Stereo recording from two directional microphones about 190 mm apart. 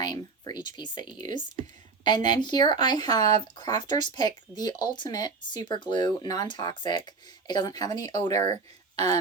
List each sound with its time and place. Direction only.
0.0 s speech: 20° left (ahead or behind)